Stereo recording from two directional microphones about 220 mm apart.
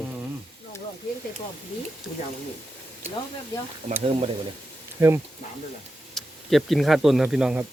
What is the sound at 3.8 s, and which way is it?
Speech, 35° right (ahead or behind).